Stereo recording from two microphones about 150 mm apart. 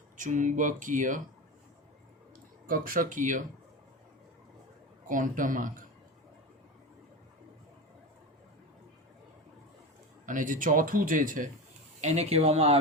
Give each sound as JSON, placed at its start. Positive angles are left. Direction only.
{"t": 0.2, "sound": "speech", "side_deg": -55}
{"t": 2.6, "sound": "speech", "side_deg": -70}
{"t": 5.0, "sound": "speech", "side_deg": -60}
{"t": 10.2, "sound": "speech", "side_deg": -60}
{"t": 11.9, "sound": "speech", "side_deg": -50}